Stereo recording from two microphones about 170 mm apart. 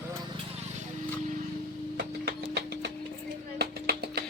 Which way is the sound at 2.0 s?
75° right (ahead or behind).